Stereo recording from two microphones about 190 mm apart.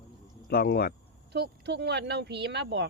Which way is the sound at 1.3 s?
60° right (ahead or behind).